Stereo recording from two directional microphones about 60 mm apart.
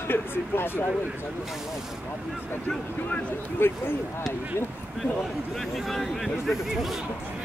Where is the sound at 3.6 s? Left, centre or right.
Left.